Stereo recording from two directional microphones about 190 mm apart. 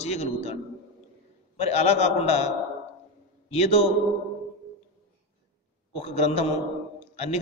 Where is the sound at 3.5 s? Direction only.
35° left (ahead or behind).